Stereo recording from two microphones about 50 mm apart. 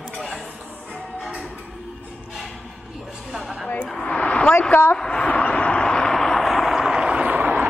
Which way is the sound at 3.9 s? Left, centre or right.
Left.